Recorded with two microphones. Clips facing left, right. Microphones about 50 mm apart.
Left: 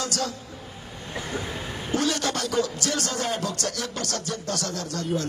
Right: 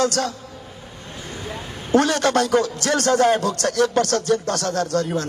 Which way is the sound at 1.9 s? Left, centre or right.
Right.